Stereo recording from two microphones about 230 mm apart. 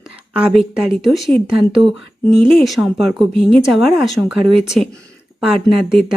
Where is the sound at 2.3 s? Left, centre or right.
Centre.